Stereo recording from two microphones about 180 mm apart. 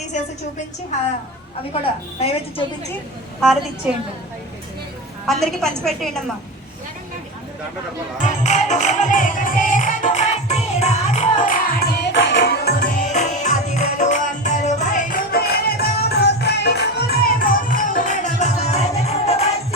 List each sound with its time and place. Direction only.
1.7 s a woman's voice: 35° left (ahead or behind)
5.2 s a woman's voice: centre (ahead or behind)
8.2 s music: 40° left (ahead or behind)
12.1 s music: 90° left; by 12.9 s 60° left (ahead or behind)
13.0 s music: 40° left (ahead or behind)